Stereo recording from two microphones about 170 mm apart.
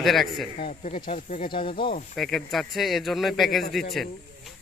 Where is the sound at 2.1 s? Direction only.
Centre (ahead or behind).